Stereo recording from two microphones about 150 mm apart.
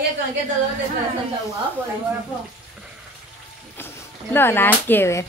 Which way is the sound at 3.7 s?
15° left (ahead or behind).